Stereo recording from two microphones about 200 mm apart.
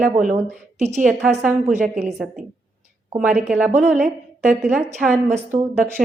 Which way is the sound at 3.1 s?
5° right (ahead or behind).